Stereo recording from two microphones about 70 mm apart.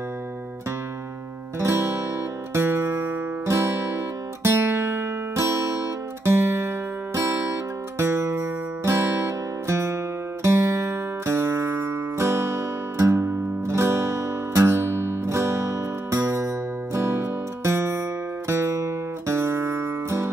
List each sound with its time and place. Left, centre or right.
1.6 s music: right